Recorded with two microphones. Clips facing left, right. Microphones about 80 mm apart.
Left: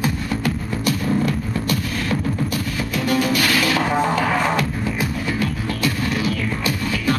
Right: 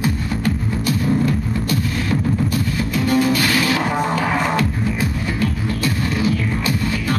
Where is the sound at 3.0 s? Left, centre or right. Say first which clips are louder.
Right 2 dB; right.